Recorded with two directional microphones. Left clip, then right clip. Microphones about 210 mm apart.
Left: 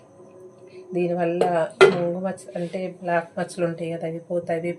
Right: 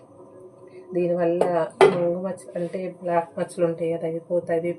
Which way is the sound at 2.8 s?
Centre (ahead or behind).